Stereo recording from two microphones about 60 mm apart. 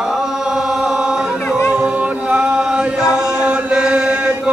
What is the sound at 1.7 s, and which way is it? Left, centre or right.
Chant, right.